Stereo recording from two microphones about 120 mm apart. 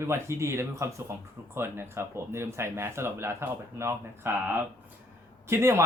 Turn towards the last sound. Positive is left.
turn(degrees=-25)  # may be behind; listen again after turning